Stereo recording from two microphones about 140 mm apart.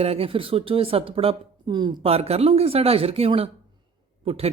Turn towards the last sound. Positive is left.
turn(degrees=-45)  # may be behind; listen again after turning